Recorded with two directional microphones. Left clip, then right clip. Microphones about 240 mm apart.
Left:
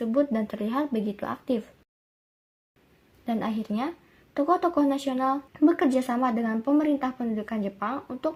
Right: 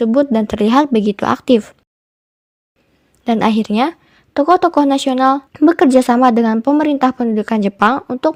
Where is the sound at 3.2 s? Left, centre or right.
Right.